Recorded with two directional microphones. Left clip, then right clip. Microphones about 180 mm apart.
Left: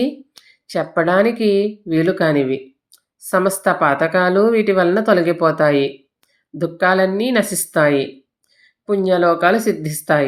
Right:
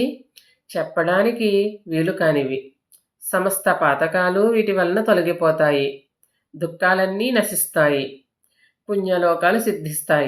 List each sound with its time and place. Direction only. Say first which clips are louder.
0.7 s speech: left 3 dB; 35° left (ahead or behind)
9.0 s speech: left 3 dB; 35° left (ahead or behind)